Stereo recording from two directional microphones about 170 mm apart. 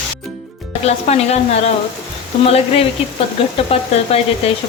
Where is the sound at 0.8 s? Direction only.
40° left (ahead or behind).